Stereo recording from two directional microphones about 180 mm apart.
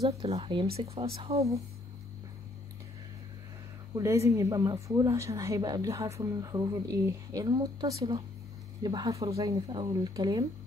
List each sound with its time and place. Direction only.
0.0 s speech: 30° right (ahead or behind)
3.9 s speech: 15° right (ahead or behind)